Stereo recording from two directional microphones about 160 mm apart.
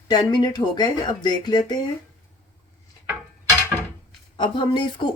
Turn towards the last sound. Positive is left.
turn(degrees=30)  # may be behind; listen again after turning